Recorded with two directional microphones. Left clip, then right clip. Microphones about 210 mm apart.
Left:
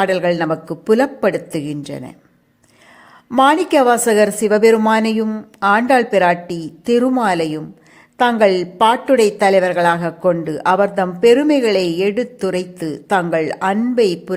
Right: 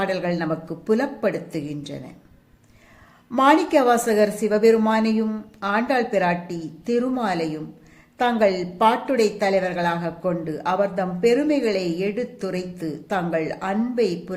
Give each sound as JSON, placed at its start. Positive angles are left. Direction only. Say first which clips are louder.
{"t": 0.0, "sound": "a woman's voice", "louder": "left 8 dB", "side_deg": 40}
{"t": 3.2, "sound": "a woman's voice", "louder": "left 4 dB", "side_deg": 40}